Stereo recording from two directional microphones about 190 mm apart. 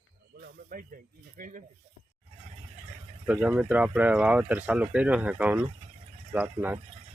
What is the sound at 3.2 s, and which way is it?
Speech, 5° right (ahead or behind).